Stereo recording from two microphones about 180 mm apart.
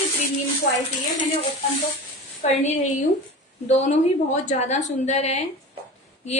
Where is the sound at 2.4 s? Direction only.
40° left (ahead or behind).